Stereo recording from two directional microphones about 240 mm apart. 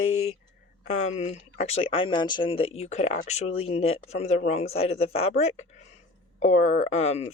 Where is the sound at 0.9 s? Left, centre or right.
Left.